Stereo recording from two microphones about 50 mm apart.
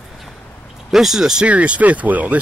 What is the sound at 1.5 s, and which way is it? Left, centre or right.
Speech, right.